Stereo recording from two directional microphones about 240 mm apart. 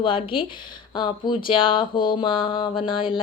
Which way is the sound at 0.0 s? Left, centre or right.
Left.